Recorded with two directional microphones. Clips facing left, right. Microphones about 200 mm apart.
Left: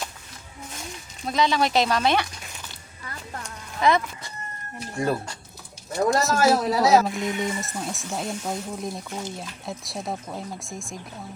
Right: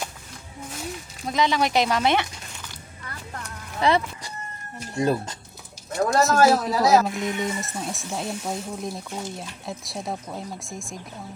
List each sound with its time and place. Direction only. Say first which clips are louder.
1.3 s speech: even; 20° right (ahead or behind)
3.8 s speech: even; 30° right (ahead or behind)
4.9 s speech: right 3 dB; 20° right (ahead or behind)
6.1 s speech: right 4 dB; centre (ahead or behind)